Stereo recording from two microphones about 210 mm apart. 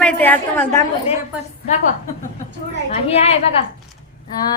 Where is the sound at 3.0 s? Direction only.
30° left (ahead or behind).